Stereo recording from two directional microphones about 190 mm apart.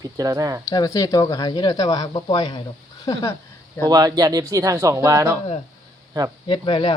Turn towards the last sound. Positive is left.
turn(degrees=25)  # may be behind; listen again after turning